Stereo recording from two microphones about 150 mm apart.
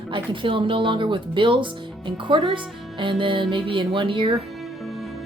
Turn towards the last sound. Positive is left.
turn(degrees=-35)  # may be behind; listen again after turning